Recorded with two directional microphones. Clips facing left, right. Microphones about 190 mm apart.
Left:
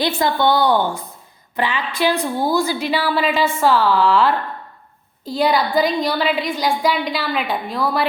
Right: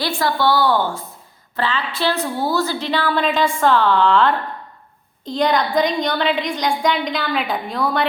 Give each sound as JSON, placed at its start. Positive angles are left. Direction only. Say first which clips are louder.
{"t": 0.0, "sound": "a woman's voice", "louder": "left 2 dB", "side_deg": 20}